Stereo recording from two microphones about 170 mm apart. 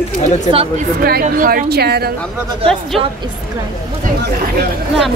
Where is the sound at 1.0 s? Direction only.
60° right (ahead or behind).